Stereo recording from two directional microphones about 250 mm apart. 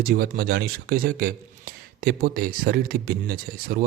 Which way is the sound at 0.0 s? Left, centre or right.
Right.